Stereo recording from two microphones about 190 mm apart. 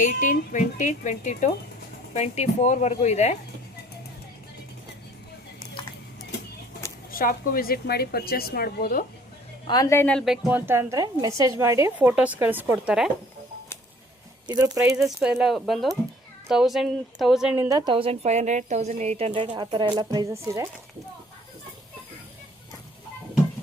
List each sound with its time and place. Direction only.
0.0 s speech: 40° left (ahead or behind)
7.1 s a woman's voice: 50° left (ahead or behind)
9.6 s a woman's voice: 20° left (ahead or behind); by 13.1 s 5° right (ahead or behind)
14.4 s speech: 20° right (ahead or behind)
15.0 s a woman's voice: 5° right (ahead or behind)